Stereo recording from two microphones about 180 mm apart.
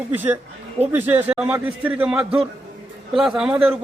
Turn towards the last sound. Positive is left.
turn(degrees=-5)  # may be behind; listen again after turning